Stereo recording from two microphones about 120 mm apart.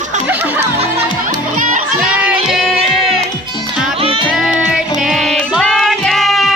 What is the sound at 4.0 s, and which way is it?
Music, 50° right (ahead or behind).